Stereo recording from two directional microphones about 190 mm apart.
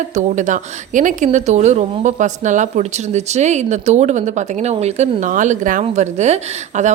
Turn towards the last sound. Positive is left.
turn(degrees=-40)  # may be behind; listen again after turning